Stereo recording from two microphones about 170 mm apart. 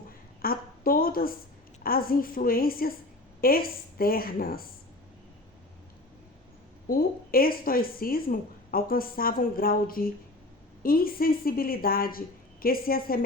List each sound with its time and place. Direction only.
0.4 s a sound: 60° left (ahead or behind)
1.8 s speech: 60° left (ahead or behind)
6.8 s speech: 60° left (ahead or behind)